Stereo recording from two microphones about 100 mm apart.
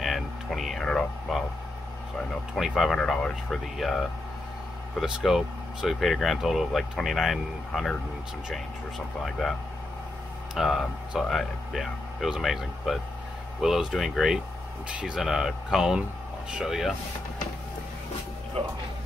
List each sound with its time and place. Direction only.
0.0 s a sound: centre (ahead or behind)
2.5 s speech: centre (ahead or behind)
10.5 s speech: centre (ahead or behind)
18.6 s speech: 70° right (ahead or behind)